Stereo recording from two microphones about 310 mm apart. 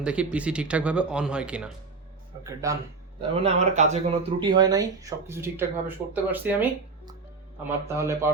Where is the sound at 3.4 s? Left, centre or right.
Right.